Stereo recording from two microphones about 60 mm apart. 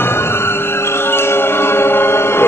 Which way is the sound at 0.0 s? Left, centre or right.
Left.